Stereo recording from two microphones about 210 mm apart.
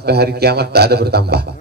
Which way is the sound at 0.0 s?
50° right (ahead or behind).